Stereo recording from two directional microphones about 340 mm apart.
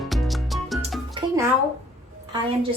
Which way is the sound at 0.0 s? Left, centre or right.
Centre.